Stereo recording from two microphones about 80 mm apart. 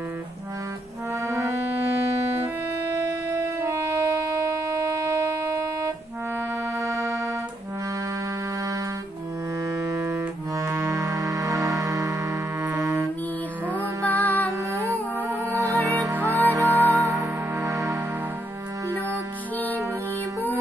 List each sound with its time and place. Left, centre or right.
1.2 s music: right
3.6 s music: right
4.6 s a sound: right
9.8 s music: right
12.6 s music: right
14.0 s music: left
14.7 s music: right